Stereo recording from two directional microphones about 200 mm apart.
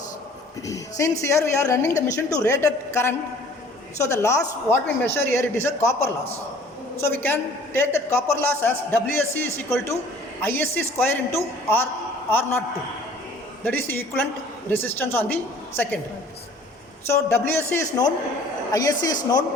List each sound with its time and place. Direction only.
0.7 s speech: 15° left (ahead or behind)
13.7 s speech: 10° left (ahead or behind)
17.1 s speech: 10° left (ahead or behind)